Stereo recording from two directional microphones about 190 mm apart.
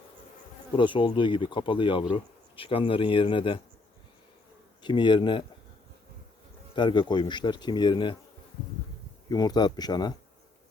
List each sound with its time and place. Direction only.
0.8 s speech: 25° left (ahead or behind)
4.8 s speech: 25° left (ahead or behind)
6.7 s speech: 25° left (ahead or behind)
9.3 s speech: 20° left (ahead or behind)